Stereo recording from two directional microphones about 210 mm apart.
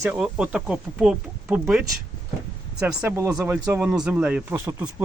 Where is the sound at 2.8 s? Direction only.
10° right (ahead or behind).